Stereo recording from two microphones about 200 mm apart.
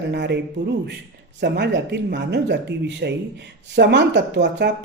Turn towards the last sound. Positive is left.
turn(degrees=-60)  # may be behind; listen again after turning